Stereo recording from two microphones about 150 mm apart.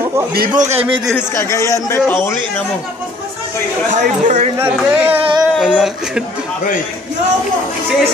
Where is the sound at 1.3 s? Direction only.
20° left (ahead or behind).